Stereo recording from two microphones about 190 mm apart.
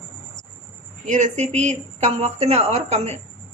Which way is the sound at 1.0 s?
40° right (ahead or behind).